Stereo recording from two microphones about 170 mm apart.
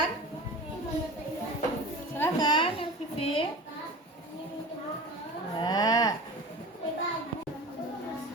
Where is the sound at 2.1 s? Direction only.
20° left (ahead or behind).